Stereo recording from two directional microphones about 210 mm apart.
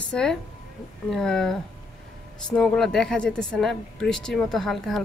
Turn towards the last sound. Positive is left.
turn(degrees=0)  # may be behind; listen again after turning